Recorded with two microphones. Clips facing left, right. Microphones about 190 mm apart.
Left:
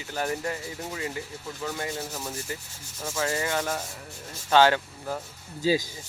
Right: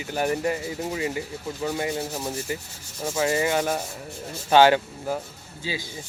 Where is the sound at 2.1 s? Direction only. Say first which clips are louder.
Right 5 dB; 30° right (ahead or behind).